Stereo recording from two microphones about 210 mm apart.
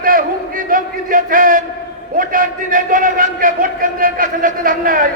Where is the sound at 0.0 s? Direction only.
40° right (ahead or behind).